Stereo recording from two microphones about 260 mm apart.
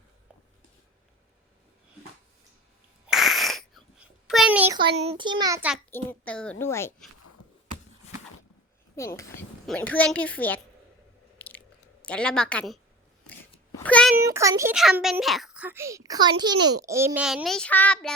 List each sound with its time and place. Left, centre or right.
3.1 s a sound: centre
4.9 s a child's voice: right
5.9 s a child's voice: centre
7.4 s a sound: left
9.0 s a child's voice: centre
11.3 s biting: centre
12.0 s a child's voice: centre
13.8 s a sound: centre
14.2 s a child's voice: centre